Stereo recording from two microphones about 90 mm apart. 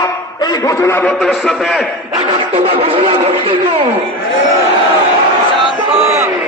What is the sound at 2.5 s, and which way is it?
Speech, 90° right.